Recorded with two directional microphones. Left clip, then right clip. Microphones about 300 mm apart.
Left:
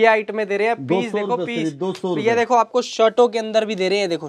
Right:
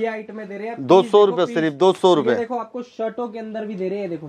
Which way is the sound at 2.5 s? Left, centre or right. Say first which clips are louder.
Left 11 dB; left.